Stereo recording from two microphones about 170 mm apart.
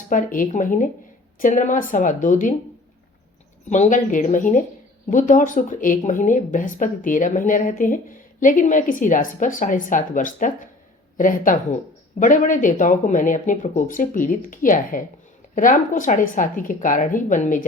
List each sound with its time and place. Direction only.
0.1 s a woman's voice: 50° left (ahead or behind)
3.7 s a woman's voice: 45° left (ahead or behind)